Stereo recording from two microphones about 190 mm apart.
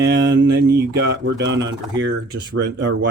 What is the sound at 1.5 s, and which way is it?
Speech, 70° right (ahead or behind).